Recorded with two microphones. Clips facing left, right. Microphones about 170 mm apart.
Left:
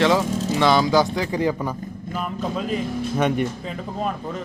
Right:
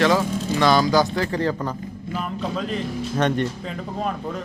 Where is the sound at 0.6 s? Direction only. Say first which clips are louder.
Even; 20° left (ahead or behind).